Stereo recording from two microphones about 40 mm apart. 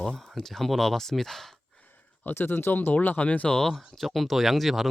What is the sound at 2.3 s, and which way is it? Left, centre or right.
Speech, left.